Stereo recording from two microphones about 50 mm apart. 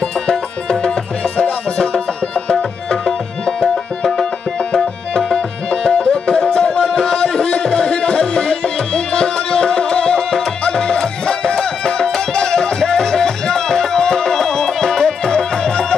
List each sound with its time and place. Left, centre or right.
0.3 s music: centre
3.1 s music: centre